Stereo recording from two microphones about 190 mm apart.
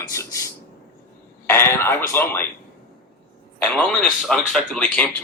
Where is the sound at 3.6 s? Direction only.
5° left (ahead or behind).